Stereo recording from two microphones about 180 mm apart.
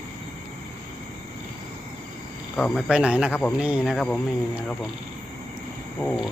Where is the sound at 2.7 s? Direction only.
5° right (ahead or behind).